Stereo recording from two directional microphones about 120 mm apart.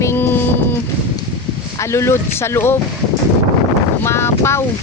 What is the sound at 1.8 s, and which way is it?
Speech, 25° left (ahead or behind).